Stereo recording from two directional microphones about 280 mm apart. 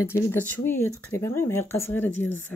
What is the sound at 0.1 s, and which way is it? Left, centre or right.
Speech, centre.